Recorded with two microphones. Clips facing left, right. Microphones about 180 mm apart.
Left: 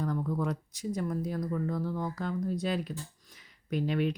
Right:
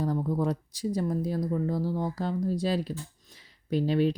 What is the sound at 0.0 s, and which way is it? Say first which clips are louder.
Speech: right 4 dB; 30° right (ahead or behind).